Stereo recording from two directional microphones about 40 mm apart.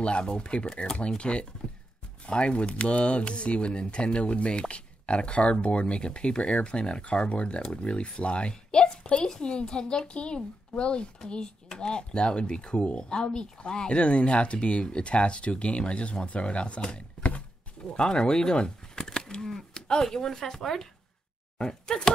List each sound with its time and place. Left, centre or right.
0.0 s speech: left
17.9 s speech: left